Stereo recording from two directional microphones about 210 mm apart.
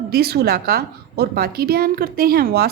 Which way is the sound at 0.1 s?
50° right (ahead or behind).